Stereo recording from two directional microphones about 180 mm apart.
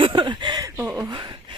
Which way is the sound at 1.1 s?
25° right (ahead or behind).